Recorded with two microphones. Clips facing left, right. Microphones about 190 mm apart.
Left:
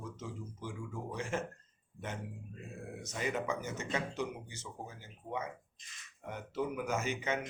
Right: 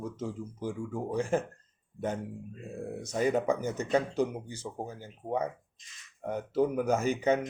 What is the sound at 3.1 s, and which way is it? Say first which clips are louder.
Speech: right 9 dB; 35° right (ahead or behind).